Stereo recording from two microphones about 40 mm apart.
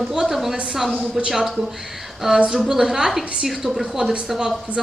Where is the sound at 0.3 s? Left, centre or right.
Centre.